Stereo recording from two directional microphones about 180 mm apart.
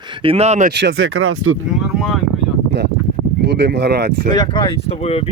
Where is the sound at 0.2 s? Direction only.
35° right (ahead or behind).